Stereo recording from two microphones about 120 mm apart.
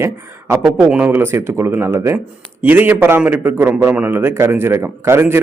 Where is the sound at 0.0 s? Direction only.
20° right (ahead or behind).